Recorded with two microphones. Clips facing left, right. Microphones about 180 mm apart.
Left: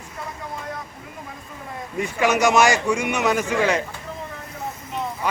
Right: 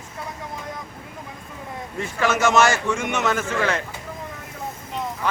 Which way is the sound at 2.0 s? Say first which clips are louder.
Left 2 dB; 15° left (ahead or behind).